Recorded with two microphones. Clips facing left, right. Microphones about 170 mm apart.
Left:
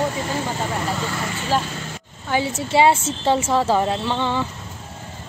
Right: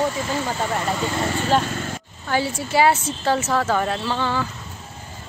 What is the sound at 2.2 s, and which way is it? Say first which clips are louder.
Speech: left 1 dB; 20° left (ahead or behind).